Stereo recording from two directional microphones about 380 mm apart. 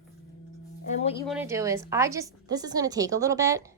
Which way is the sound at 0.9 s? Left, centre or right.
Centre.